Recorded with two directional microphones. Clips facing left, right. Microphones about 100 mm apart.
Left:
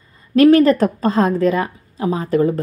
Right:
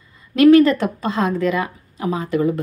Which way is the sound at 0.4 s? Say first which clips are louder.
Left 1 dB; 40° left (ahead or behind).